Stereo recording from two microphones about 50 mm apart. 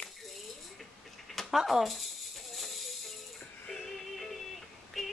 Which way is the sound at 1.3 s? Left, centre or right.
Centre.